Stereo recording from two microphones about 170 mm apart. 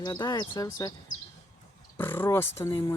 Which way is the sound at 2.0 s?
15° left (ahead or behind).